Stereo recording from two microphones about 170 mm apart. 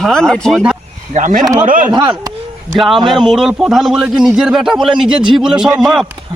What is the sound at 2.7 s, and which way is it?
A man's voice, centre (ahead or behind).